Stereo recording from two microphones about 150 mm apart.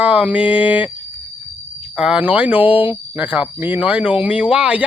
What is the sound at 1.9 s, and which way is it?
Speech, 5° right (ahead or behind).